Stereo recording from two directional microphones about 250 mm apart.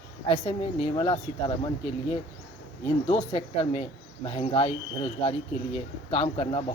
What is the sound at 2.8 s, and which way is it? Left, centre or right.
Speech, left.